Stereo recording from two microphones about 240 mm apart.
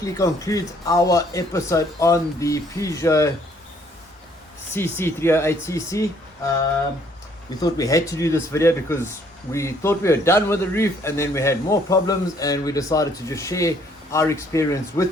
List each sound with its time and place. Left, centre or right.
0.0 s a man's voice: centre
4.7 s a man's voice: centre
7.6 s a man's voice: centre